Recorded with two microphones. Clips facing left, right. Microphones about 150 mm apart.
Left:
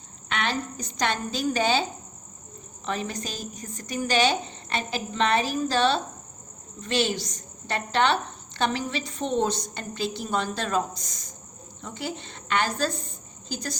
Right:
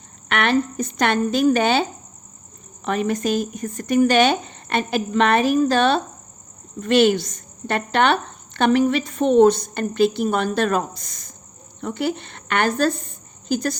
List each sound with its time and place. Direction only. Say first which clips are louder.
0.3 s speech: right 9 dB; 60° right (ahead or behind)